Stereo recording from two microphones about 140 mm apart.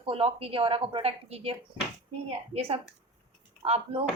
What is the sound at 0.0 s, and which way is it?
A woman's voice, 40° right (ahead or behind).